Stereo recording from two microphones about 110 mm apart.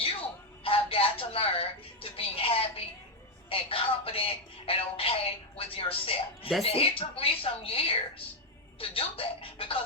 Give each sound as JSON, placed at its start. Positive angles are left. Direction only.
{"t": 0.6, "sound": "music", "side_deg": 55}
{"t": 5.5, "sound": "a woman's voice", "side_deg": 60}